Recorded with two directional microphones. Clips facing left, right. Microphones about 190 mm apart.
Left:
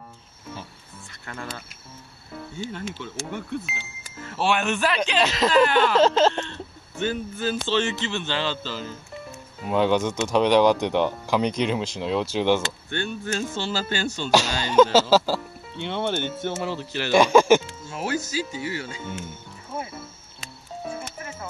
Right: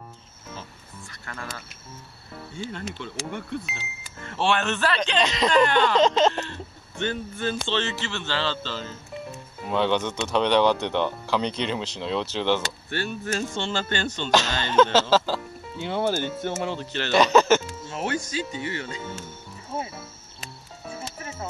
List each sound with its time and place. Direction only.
1.2 s speech: 20° left (ahead or behind)
2.5 s speech: 5° left (ahead or behind)
7.0 s speech: 5° left (ahead or behind)
12.9 s speech: centre (ahead or behind)
15.7 s speech: 5° right (ahead or behind)
16.6 s speech: 5° left (ahead or behind)
19.7 s wild animals: 30° right (ahead or behind)